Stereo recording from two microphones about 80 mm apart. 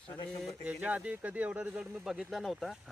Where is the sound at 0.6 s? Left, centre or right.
Centre.